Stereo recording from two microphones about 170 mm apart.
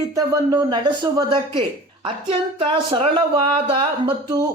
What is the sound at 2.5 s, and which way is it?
Speech, 30° right (ahead or behind).